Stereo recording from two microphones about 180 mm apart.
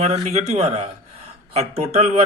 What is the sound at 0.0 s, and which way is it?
A man's voice, 35° right (ahead or behind).